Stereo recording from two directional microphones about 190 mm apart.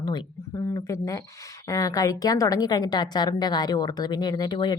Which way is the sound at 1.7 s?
15° left (ahead or behind).